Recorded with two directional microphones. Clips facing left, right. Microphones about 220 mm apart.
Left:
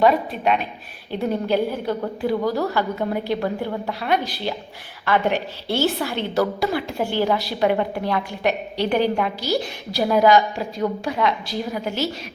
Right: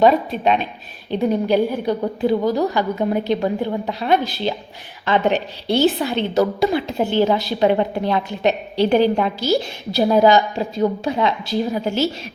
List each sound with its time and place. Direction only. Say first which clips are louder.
0.0 s a woman's voice: right 3 dB; 25° right (ahead or behind)
1.2 s a woman's voice: right 4 dB; 15° right (ahead or behind)